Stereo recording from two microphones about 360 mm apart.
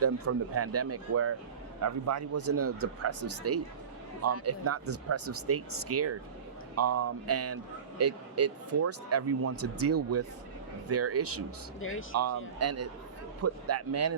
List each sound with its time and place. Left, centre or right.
0.0 s a man's voice: right
11.8 s speech: left
12.5 s a man's voice: right